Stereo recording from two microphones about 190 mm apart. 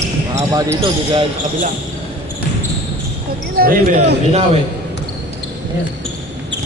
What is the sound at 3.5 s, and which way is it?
Speech, 50° right (ahead or behind).